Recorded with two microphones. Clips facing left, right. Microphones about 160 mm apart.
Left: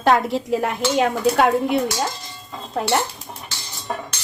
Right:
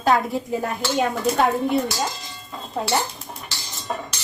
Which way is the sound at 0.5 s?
80° left.